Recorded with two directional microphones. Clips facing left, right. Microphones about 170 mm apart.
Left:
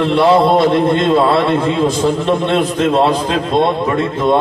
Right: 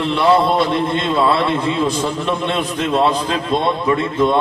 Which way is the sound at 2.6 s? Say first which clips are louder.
Left 5 dB; 25° left (ahead or behind).